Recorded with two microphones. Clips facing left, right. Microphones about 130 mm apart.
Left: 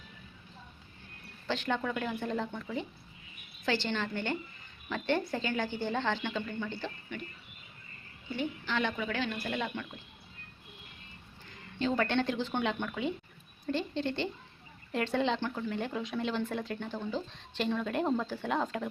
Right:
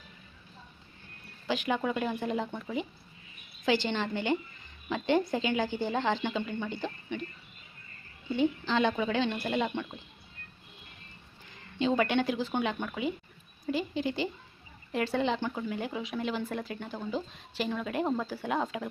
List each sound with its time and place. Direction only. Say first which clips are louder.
1.5 s speech: right 3 dB; 10° right (ahead or behind)
3.7 s speech: right 4 dB; 15° right (ahead or behind)
8.6 s a woman's voice: right 5 dB; 25° right (ahead or behind)
11.8 s speech: right 3 dB; 15° right (ahead or behind)